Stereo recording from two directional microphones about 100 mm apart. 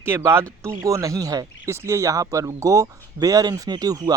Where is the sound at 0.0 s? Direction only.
25° right (ahead or behind).